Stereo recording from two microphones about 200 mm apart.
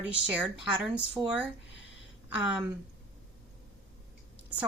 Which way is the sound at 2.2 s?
5° right (ahead or behind).